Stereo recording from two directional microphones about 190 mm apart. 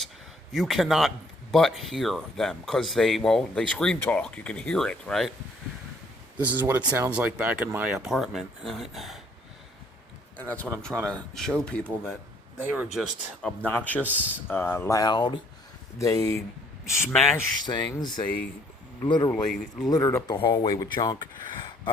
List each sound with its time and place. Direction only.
0.5 s speech: centre (ahead or behind)
6.4 s speech: 10° right (ahead or behind)
10.3 s speech: 10° left (ahead or behind)
12.5 s speech: 5° right (ahead or behind); by 19.3 s 25° left (ahead or behind)
19.3 s speech: centre (ahead or behind)
19.9 s speech: 15° left (ahead or behind)
20.3 s speech: 25° left (ahead or behind)